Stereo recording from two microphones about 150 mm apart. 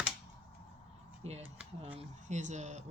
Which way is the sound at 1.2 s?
45° right (ahead or behind).